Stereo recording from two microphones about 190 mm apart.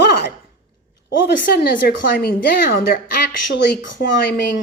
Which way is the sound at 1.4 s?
50° left (ahead or behind).